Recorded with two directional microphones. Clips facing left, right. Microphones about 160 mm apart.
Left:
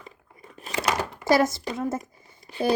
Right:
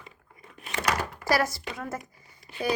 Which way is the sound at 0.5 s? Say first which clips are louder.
Left 3 dB; 35° left (ahead or behind).